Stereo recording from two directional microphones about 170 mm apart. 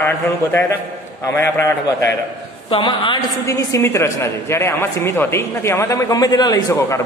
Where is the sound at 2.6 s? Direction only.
30° left (ahead or behind).